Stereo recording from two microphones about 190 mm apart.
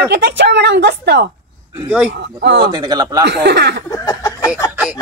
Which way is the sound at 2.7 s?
20° right (ahead or behind).